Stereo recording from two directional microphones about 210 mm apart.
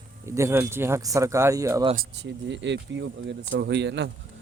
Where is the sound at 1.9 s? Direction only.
55° right (ahead or behind).